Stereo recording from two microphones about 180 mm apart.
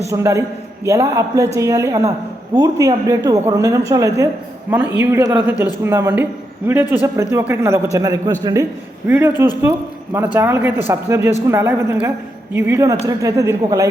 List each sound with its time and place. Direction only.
0.1 s a woman's voice: 15° right (ahead or behind)